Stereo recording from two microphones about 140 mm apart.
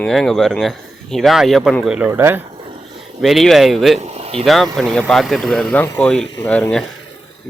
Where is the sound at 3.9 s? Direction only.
50° right (ahead or behind).